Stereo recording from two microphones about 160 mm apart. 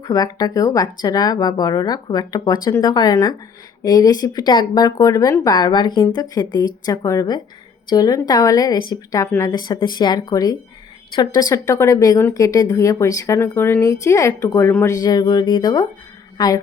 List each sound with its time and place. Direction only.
0.0 s a woman's voice: 25° left (ahead or behind)